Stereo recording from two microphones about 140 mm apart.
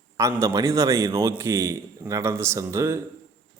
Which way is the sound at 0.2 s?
20° right (ahead or behind).